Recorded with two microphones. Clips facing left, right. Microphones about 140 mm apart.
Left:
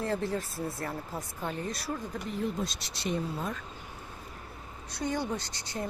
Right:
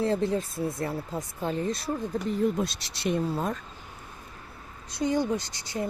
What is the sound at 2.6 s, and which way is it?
Speech, 70° right (ahead or behind).